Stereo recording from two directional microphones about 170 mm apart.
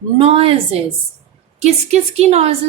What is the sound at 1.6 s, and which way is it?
Speech, 40° right (ahead or behind).